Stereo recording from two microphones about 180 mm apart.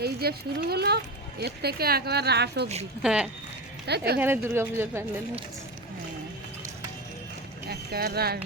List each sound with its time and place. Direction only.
0.0 s a child's voice: 60° right (ahead or behind)
3.0 s speech: 5° right (ahead or behind)
3.8 s a child's voice: 65° right (ahead or behind)
4.2 s speech: 15° right (ahead or behind)
7.7 s speech: 60° right (ahead or behind)